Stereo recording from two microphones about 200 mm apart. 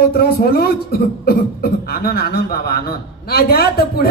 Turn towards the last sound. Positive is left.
turn(degrees=50)  # may be behind; listen again after turning